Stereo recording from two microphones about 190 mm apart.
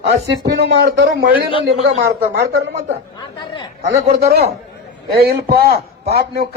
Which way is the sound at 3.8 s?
35° right (ahead or behind).